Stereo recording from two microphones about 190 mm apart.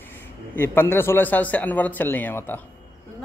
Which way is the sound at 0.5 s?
10° left (ahead or behind).